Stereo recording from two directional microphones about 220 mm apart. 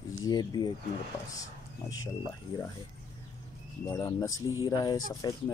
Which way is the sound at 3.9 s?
15° left (ahead or behind).